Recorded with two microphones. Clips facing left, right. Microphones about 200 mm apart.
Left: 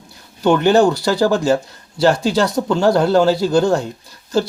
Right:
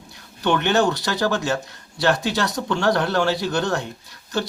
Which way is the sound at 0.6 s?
30° left (ahead or behind).